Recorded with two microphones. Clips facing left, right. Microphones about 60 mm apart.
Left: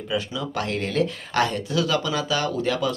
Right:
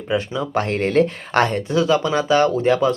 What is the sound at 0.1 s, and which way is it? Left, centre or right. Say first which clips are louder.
Speech: right 6 dB; right.